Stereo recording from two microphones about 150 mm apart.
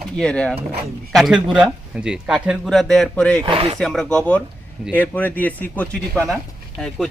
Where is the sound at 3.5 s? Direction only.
35° right (ahead or behind).